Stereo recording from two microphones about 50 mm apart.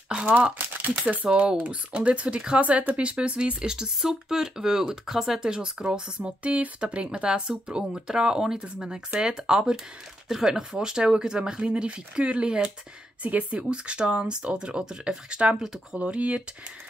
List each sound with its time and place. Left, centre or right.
0.7 s speech: right
1.2 s speech: right
13.2 s speech: right